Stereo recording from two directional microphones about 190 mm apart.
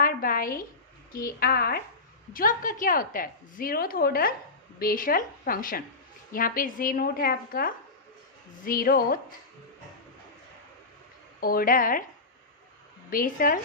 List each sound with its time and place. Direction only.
0.0 s a woman's voice: 50° left (ahead or behind)
11.3 s a woman's voice: 50° left (ahead or behind)
13.1 s a woman's voice: 45° left (ahead or behind)